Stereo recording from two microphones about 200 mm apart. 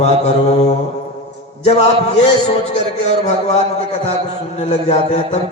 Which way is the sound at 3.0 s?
35° left (ahead or behind).